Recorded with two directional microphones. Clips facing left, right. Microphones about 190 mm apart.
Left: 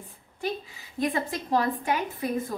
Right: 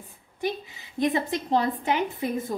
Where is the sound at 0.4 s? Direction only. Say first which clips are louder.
Right 2 dB; 20° right (ahead or behind).